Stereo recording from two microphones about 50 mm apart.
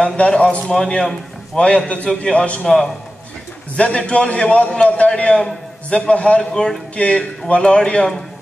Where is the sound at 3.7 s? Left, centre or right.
Left.